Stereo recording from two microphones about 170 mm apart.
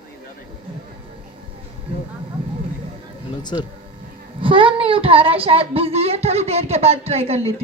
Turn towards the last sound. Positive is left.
turn(degrees=-35)  # may be behind; listen again after turning